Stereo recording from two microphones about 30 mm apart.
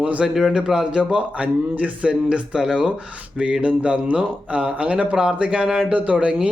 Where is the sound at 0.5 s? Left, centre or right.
Right.